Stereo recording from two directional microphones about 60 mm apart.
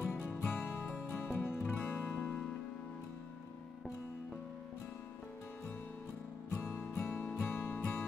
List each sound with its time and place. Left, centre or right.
0.1 s music: left
6.5 s music: left
7.1 s music: left